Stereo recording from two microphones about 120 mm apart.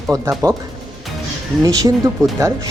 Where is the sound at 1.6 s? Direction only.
35° right (ahead or behind).